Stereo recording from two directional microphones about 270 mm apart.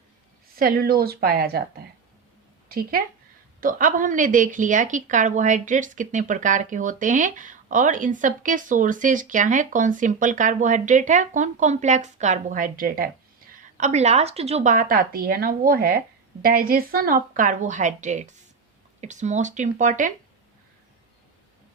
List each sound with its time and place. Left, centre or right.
0.5 s a woman's voice: right